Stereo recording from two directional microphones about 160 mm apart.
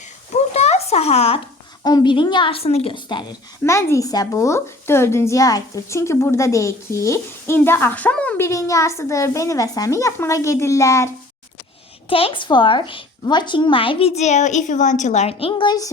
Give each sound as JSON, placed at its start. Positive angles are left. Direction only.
{"t": 0.3, "sound": "a sound", "side_deg": 40}
{"t": 1.8, "sound": "a woman's voice", "side_deg": 25}
{"t": 3.6, "sound": "speech", "side_deg": 15}
{"t": 12.0, "sound": "a woman's voice", "side_deg": 35}